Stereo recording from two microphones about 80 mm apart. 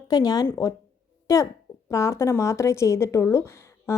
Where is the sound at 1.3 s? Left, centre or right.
Left.